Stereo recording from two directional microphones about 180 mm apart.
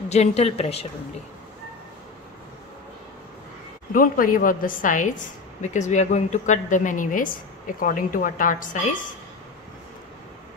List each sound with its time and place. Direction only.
0.1 s speech: 35° left (ahead or behind)
3.9 s a woman's voice: 50° left (ahead or behind)